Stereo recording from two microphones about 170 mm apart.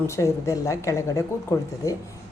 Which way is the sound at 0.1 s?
20° left (ahead or behind).